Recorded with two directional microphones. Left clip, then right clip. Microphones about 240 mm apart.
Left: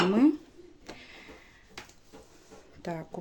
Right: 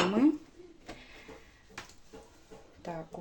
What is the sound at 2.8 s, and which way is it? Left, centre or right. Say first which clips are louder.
Speech: left 3 dB; left.